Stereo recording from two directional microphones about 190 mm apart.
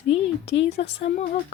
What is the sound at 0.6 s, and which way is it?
Speech, 70° left (ahead or behind).